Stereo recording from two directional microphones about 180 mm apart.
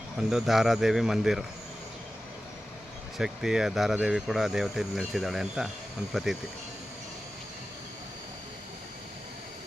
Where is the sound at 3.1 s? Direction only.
5° right (ahead or behind).